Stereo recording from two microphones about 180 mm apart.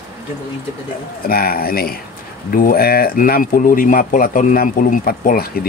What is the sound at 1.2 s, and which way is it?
Speech, 55° left (ahead or behind).